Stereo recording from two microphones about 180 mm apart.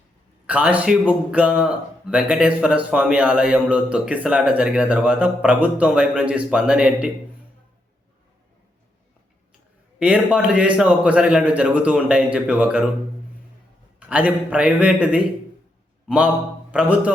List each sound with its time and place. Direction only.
0.4 s speech: 10° right (ahead or behind)
10.0 s speech: 5° right (ahead or behind)
14.1 s a man's voice: 10° right (ahead or behind)